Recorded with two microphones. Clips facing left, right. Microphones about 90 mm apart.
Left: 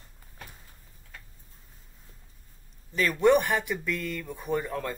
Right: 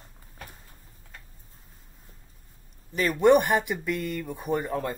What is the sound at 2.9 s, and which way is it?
Speech, 10° right (ahead or behind).